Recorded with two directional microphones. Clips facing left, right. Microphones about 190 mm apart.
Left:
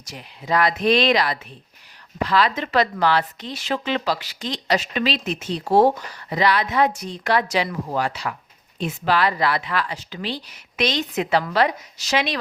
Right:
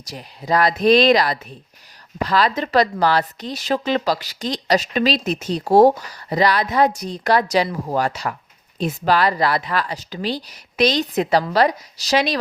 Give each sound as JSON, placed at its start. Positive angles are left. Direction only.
{"t": 0.0, "sound": "a woman's voice", "side_deg": -35}